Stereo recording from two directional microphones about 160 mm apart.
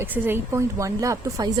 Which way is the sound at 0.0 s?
15° right (ahead or behind).